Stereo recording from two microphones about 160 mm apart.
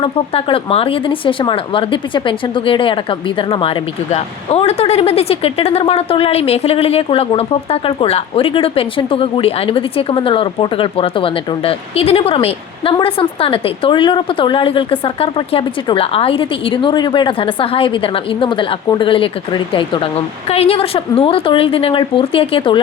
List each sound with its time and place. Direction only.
0.0 s speech: 35° left (ahead or behind)